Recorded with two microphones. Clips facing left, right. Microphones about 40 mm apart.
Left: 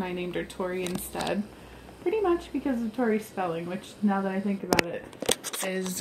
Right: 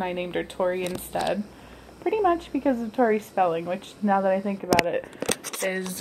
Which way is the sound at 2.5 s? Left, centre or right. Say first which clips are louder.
Right 5 dB; centre.